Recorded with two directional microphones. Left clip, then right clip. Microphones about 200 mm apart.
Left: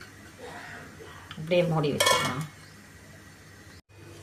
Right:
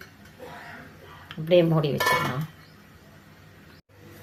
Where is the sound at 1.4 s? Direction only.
25° right (ahead or behind).